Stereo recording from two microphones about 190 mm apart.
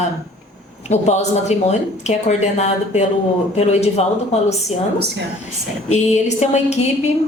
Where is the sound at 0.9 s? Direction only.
35° left (ahead or behind).